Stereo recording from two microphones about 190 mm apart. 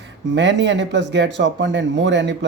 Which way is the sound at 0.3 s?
70° right (ahead or behind).